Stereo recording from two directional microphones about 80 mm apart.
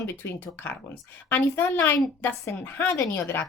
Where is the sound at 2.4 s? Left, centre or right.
Left.